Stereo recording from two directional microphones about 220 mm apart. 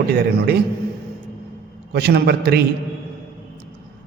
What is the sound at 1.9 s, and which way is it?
Speech, 45° right (ahead or behind).